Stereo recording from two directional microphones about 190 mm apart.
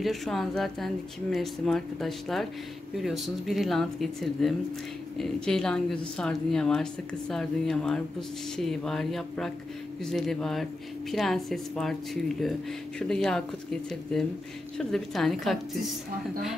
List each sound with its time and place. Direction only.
0.0 s speech: centre (ahead or behind)